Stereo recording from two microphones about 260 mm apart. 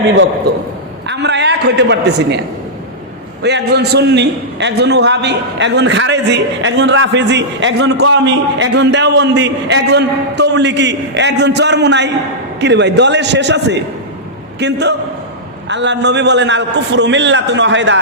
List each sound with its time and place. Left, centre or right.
1.0 s a man's voice: right
3.4 s a man's voice: right